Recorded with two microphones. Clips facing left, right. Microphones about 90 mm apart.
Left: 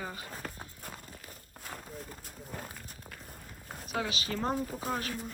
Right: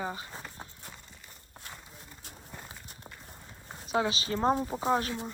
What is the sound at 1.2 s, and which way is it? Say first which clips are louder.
Crumpling: left 2 dB; 5° left (ahead or behind).